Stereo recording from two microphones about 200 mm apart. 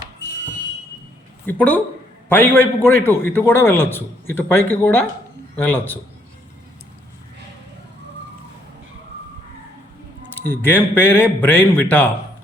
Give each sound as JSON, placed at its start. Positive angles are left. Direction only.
{"t": 1.5, "sound": "a man's voice", "side_deg": 10}
{"t": 10.4, "sound": "a man's voice", "side_deg": 10}